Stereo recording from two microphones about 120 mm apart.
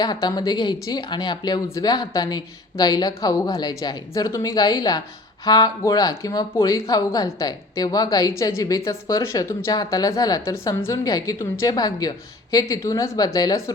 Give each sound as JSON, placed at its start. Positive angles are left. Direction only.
{"t": 0.0, "sound": "speech", "side_deg": 35}